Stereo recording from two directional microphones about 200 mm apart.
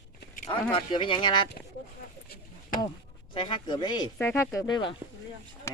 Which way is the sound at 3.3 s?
25° left (ahead or behind).